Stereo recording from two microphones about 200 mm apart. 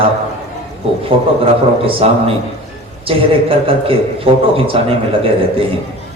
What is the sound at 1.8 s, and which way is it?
A man's voice, 30° right (ahead or behind).